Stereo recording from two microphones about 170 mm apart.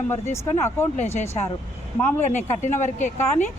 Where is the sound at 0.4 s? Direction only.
15° left (ahead or behind).